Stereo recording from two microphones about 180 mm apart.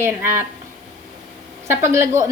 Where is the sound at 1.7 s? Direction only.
15° right (ahead or behind).